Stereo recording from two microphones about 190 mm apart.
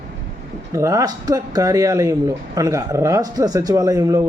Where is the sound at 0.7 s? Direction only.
15° right (ahead or behind).